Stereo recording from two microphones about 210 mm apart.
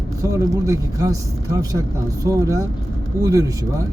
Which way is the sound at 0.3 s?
15° right (ahead or behind).